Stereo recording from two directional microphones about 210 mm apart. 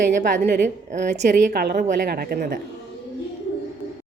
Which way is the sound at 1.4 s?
45° right (ahead or behind).